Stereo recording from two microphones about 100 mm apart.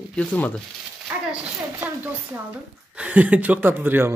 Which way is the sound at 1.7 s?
20° right (ahead or behind).